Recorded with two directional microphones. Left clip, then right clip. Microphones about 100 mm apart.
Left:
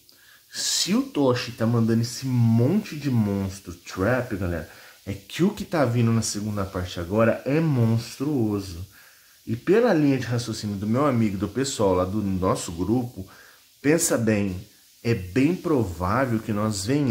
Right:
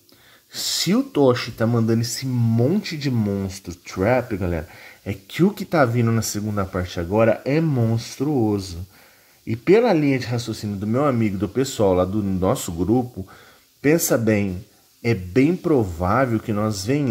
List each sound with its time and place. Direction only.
0.5 s speech: 45° right (ahead or behind)
2.3 s speech: 10° right (ahead or behind)
4.0 s speech: 30° right (ahead or behind)
7.1 s speech: 20° right (ahead or behind)
7.7 s speech: 10° right (ahead or behind)
8.0 s speech: 25° right (ahead or behind); by 13.0 s 45° right (ahead or behind)
13.8 s speech: 35° right (ahead or behind)